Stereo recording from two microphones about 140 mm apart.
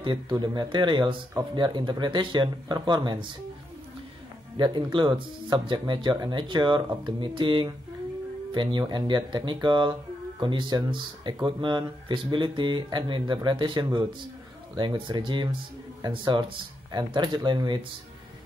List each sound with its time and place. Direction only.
0.0 s speech: 35° right (ahead or behind)
4.6 s speech: 35° right (ahead or behind)